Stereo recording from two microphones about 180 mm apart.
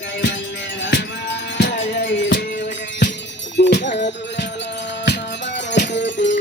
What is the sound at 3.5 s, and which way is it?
Wind chime, 75° left (ahead or behind).